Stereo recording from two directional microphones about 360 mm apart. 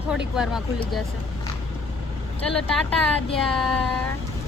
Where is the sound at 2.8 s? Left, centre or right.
Centre.